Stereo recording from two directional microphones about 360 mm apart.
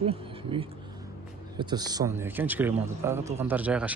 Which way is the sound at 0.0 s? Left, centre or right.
Centre.